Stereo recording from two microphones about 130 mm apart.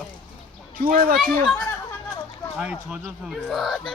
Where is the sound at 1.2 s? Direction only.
Centre (ahead or behind).